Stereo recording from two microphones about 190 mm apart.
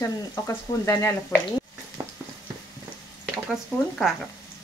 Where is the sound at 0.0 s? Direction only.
15° left (ahead or behind).